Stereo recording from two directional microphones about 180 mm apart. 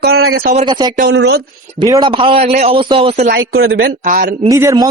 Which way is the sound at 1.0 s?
75° right (ahead or behind).